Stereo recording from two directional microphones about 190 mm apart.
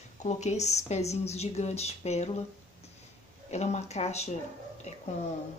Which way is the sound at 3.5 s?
35° left (ahead or behind).